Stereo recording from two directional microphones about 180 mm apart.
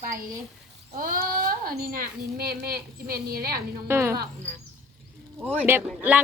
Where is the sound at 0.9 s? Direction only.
50° right (ahead or behind).